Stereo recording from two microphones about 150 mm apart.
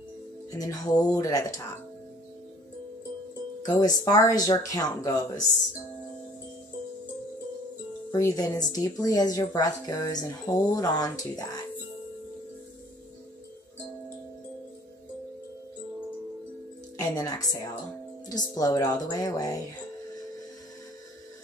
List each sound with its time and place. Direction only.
0.5 s speech: 25° left (ahead or behind)
3.6 s speech: 25° left (ahead or behind)
8.1 s speech: 25° left (ahead or behind)
16.9 s speech: 25° left (ahead or behind)